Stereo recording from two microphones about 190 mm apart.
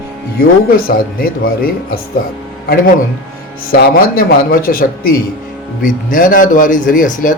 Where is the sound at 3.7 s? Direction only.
50° left (ahead or behind).